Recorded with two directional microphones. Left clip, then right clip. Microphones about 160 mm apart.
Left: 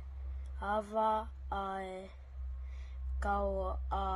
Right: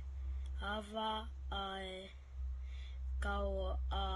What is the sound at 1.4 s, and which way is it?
Mantra, 30° right (ahead or behind).